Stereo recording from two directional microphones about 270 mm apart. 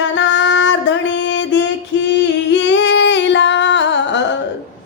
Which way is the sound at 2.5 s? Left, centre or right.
Left.